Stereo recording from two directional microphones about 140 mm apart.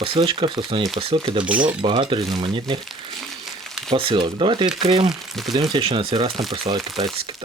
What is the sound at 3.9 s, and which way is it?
Speech, 40° right (ahead or behind).